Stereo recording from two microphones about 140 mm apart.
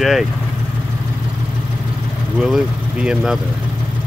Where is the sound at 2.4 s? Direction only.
5° right (ahead or behind).